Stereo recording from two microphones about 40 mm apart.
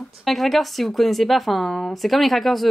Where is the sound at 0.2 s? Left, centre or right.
Centre.